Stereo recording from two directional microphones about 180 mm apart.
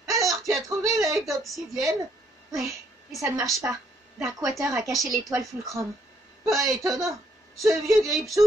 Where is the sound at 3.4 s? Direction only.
Centre (ahead or behind).